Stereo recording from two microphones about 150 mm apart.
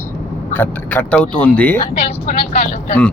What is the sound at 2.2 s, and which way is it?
Speech, 70° left (ahead or behind).